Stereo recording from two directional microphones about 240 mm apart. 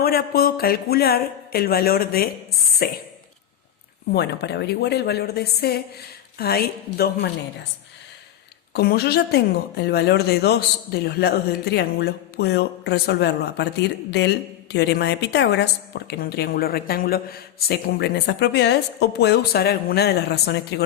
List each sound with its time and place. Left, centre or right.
0.0 s speech: left
4.1 s a woman's voice: left
8.7 s a woman's voice: left